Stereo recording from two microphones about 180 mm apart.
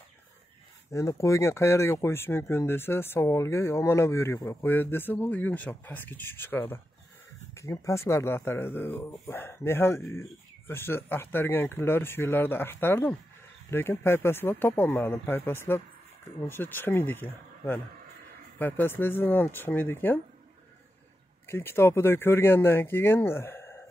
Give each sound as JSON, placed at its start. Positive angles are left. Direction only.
{"t": 0.9, "sound": "speech", "side_deg": 15}
{"t": 21.5, "sound": "speech", "side_deg": 15}